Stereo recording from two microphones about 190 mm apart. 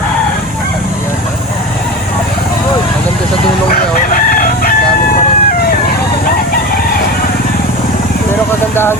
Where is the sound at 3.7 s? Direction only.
45° left (ahead or behind).